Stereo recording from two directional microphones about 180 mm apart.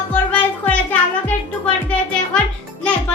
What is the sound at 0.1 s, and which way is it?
Music, 10° left (ahead or behind).